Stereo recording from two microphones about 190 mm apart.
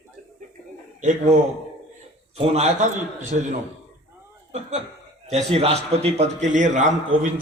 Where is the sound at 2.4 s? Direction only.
35° right (ahead or behind).